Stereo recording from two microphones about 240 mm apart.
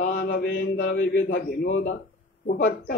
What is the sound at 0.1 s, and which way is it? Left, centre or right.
A man's voice, left.